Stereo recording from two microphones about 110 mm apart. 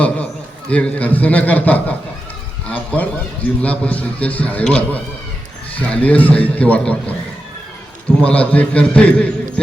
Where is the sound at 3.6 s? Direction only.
10° left (ahead or behind).